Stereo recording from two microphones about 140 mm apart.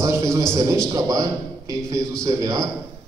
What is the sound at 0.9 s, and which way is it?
A man's voice, 25° right (ahead or behind).